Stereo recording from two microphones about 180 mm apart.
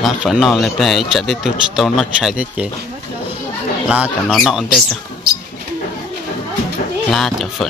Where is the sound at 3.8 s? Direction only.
5° right (ahead or behind).